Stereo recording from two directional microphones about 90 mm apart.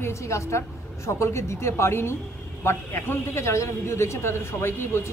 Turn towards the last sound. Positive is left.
turn(degrees=30)  # may be behind; listen again after turning